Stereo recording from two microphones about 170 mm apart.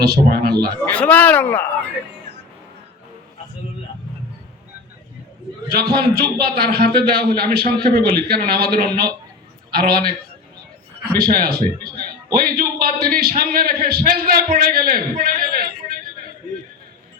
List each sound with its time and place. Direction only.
0.0 s a man's voice: 65° right (ahead or behind)
0.8 s speech: 10° left (ahead or behind)
5.7 s a man's voice: 70° right (ahead or behind)
11.2 s a man's voice: 65° right (ahead or behind)